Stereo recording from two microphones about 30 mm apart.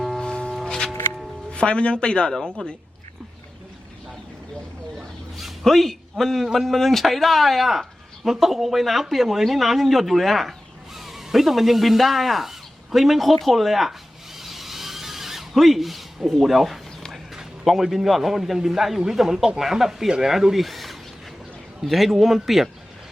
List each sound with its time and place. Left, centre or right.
0.2 s music: left
0.5 s music: centre
0.9 s music: centre
1.5 s speech: left
2.3 s a man's voice: centre
5.6 s a man's voice: centre
14.3 s a sound: centre
15.5 s a man's voice: centre